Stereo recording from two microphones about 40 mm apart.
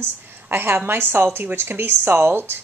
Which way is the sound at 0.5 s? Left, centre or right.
Right.